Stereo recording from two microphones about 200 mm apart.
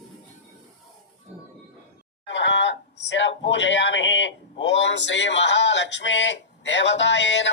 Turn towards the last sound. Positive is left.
turn(degrees=65)  # may be behind; listen again after turning